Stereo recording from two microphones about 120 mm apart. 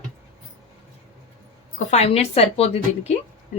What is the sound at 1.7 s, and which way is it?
A woman's voice, 65° left (ahead or behind).